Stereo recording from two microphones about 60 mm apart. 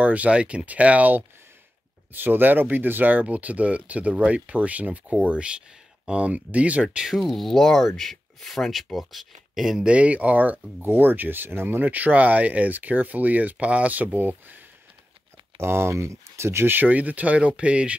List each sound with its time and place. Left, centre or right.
0.0 s speech: right
7.1 s speech: centre
9.8 s speech: right
15.6 s speech: right; by 17.9 s centre